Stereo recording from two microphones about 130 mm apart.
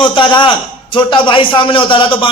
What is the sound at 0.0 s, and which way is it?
A man's voice, 40° left (ahead or behind).